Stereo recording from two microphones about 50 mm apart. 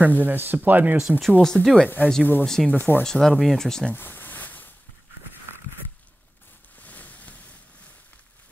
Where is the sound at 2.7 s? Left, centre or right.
Left.